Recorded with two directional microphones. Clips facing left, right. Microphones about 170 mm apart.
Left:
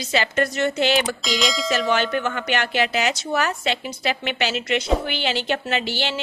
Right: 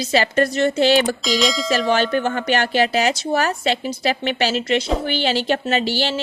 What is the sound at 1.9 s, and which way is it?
A woman's voice, 35° right (ahead or behind).